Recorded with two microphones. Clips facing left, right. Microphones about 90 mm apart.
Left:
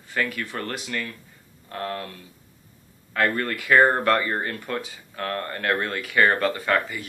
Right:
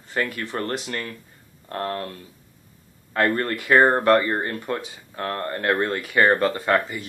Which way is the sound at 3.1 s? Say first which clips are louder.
Right 2 dB; 35° right (ahead or behind).